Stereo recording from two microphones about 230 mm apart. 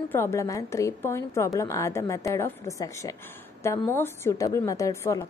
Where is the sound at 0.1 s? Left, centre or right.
Centre.